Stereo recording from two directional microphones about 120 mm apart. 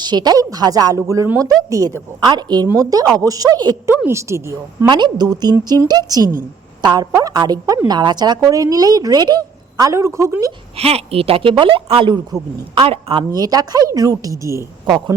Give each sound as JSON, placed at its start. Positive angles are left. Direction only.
{"t": 0.0, "sound": "a woman's voice", "side_deg": -35}
{"t": 4.9, "sound": "a woman's voice", "side_deg": -40}
{"t": 10.8, "sound": "speech", "side_deg": -55}
{"t": 12.8, "sound": "speech", "side_deg": -50}
{"t": 13.3, "sound": "a woman's voice", "side_deg": -30}
{"t": 14.8, "sound": "speech", "side_deg": -40}